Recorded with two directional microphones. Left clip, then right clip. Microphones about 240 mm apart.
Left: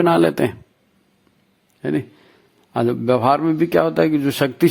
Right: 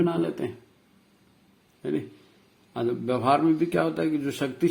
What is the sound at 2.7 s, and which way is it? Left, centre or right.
A man's voice, left.